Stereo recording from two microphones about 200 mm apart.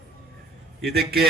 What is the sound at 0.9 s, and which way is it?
Speech, 50° right (ahead or behind).